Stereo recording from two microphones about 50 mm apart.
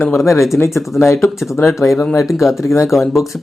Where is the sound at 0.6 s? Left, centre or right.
Left.